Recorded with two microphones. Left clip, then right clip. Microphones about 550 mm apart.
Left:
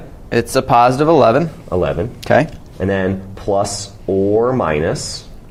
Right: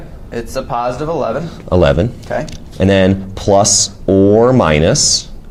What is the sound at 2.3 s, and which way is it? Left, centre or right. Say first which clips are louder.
Speech: left 10 dB; left.